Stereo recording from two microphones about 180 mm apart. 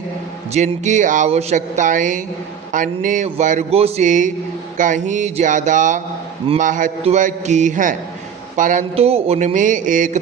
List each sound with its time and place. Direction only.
0.5 s speech: 40° right (ahead or behind)
9.0 s speech: 35° right (ahead or behind)